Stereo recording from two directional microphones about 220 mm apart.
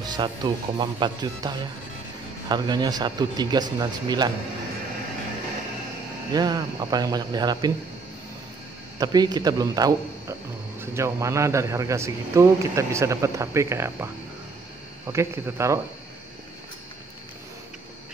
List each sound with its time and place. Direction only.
0.0 s speech: 20° right (ahead or behind)
6.3 s a man's voice: 20° right (ahead or behind)
8.9 s a man's voice: 20° right (ahead or behind)
15.1 s a man's voice: 10° right (ahead or behind)